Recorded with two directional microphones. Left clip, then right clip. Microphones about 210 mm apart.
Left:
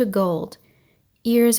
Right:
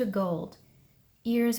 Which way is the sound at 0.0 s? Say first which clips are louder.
Left 9 dB; 40° left (ahead or behind).